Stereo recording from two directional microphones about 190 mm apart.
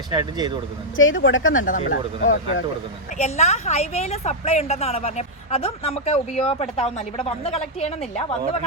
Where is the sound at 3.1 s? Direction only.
35° left (ahead or behind).